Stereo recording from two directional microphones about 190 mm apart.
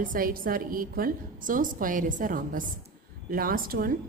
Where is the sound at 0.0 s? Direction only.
45° right (ahead or behind).